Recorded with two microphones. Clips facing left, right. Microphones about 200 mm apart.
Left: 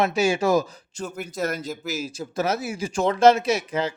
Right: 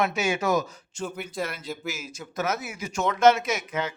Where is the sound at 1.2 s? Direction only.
45° left (ahead or behind).